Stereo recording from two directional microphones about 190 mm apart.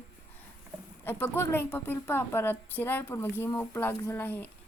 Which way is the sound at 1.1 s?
10° left (ahead or behind).